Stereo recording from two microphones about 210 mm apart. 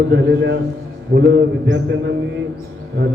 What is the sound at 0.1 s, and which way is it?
A man's voice, 55° right (ahead or behind).